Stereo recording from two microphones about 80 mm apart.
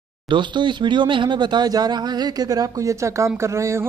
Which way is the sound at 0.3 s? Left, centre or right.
Right.